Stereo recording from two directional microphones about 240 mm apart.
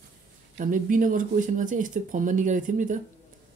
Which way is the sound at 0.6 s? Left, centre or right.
Right.